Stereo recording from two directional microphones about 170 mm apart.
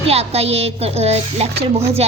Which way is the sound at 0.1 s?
35° right (ahead or behind).